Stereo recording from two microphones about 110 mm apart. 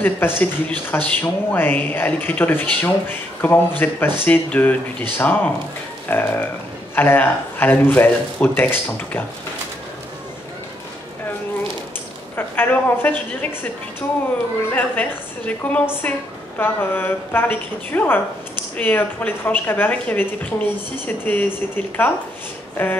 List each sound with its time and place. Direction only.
0.0 s speech: 20° left (ahead or behind)
12.4 s speech: 20° left (ahead or behind)
14.7 s a woman's voice: 15° left (ahead or behind)